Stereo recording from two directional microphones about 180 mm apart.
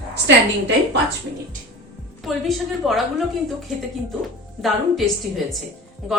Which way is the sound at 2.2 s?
Centre (ahead or behind).